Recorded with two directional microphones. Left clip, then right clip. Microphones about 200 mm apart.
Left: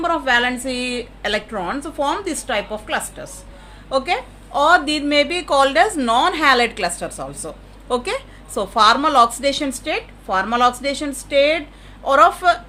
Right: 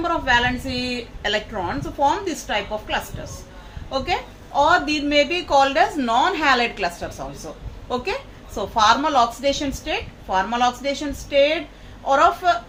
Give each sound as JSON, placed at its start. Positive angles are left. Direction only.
{"t": 0.0, "sound": "a woman's voice", "side_deg": 60}